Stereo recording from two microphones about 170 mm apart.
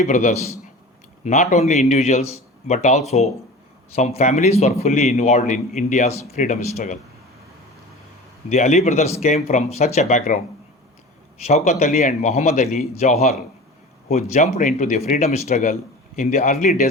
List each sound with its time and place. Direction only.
0.0 s a man's voice: 45° left (ahead or behind)
8.4 s speech: 45° left (ahead or behind)
11.4 s speech: 40° left (ahead or behind)